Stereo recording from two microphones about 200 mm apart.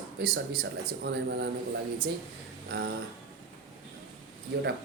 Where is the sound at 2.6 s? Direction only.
55° right (ahead or behind).